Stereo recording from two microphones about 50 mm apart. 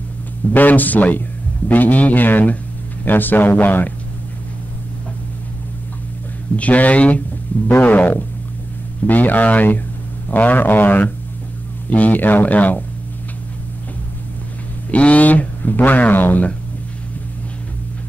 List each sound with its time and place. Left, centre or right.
0.5 s speech: left
6.5 s speech: left
14.9 s speech: left